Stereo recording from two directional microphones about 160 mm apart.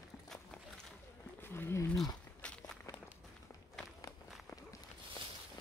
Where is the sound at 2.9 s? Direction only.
20° left (ahead or behind).